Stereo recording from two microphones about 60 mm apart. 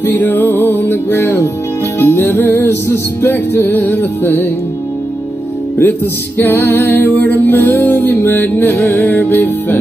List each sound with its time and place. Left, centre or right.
0.0 s music: left
5.8 s music: left